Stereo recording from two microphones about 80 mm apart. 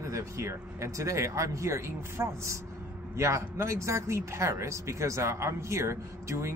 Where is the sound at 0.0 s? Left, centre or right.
Right.